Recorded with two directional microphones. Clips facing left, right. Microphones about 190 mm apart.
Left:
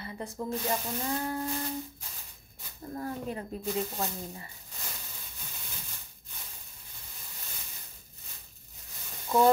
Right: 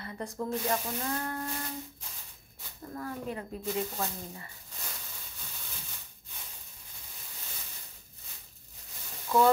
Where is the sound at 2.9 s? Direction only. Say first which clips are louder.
Left 2 dB; 30° left (ahead or behind).